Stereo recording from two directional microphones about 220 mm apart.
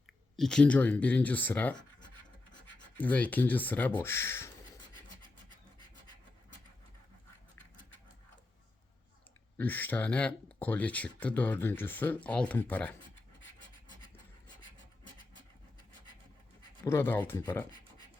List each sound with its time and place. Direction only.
0.3 s speech: 5° left (ahead or behind)
3.0 s speech: 5° left (ahead or behind)
9.6 s speech: 10° left (ahead or behind)
16.8 s speech: 10° left (ahead or behind)